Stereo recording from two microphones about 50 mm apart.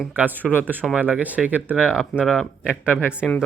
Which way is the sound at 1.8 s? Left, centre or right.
Centre.